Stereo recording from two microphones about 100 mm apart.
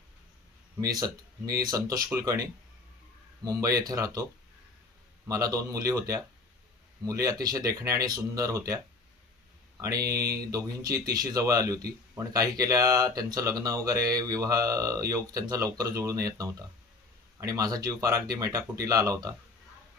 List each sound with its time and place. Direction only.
0.7 s speech: 40° right (ahead or behind)
5.3 s speech: 35° right (ahead or behind)